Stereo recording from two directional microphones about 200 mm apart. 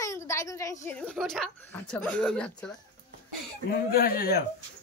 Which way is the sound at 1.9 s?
5° left (ahead or behind).